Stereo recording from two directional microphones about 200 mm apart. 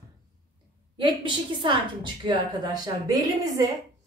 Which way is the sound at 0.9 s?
25° right (ahead or behind).